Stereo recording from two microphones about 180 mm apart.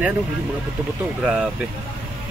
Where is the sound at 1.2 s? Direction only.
5° right (ahead or behind).